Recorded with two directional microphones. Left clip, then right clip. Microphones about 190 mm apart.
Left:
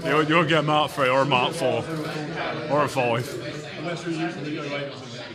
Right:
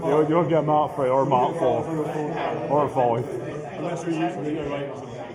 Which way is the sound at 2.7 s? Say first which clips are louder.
Right 1 dB; 35° left (ahead or behind).